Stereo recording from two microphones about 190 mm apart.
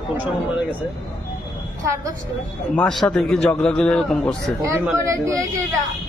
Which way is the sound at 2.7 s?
5° left (ahead or behind).